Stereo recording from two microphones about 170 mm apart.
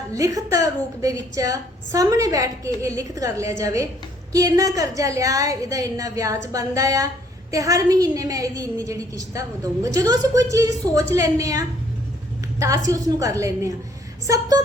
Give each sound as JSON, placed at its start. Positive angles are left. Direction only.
{"t": 0.1, "sound": "a woman's voice", "side_deg": -20}